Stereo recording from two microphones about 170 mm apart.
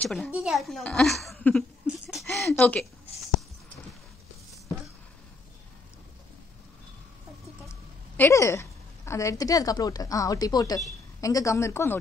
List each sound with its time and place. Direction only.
0.0 s a woman's voice: centre (ahead or behind)
2.0 s a sound: centre (ahead or behind)
8.2 s a woman's voice: 15° left (ahead or behind)